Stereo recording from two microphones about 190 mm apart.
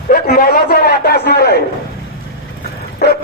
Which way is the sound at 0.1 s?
50° left (ahead or behind).